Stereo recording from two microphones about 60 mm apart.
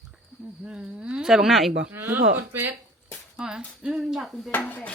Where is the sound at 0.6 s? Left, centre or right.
Centre.